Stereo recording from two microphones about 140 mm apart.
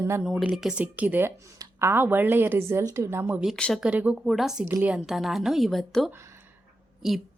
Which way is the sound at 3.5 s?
5° left (ahead or behind).